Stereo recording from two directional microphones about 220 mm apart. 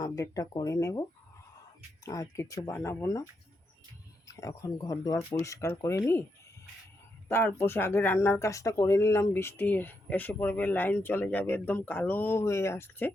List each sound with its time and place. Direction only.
0.0 s speech: 15° left (ahead or behind)
2.0 s speech: 15° left (ahead or behind)
4.3 s speech: 15° left (ahead or behind)
7.3 s speech: 10° left (ahead or behind)